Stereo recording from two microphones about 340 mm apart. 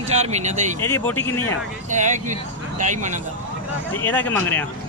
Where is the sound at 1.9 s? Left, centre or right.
Right.